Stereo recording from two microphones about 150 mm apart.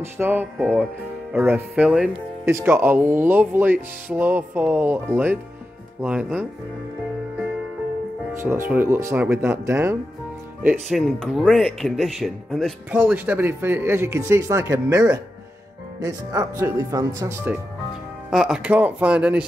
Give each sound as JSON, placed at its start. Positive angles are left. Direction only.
{"t": 0.0, "sound": "speech", "side_deg": -15}
{"t": 0.6, "sound": "speech", "side_deg": 0}
{"t": 8.4, "sound": "speech", "side_deg": -15}
{"t": 10.9, "sound": "speech", "side_deg": 0}
{"t": 12.9, "sound": "speech", "side_deg": -10}
{"t": 18.3, "sound": "speech", "side_deg": -5}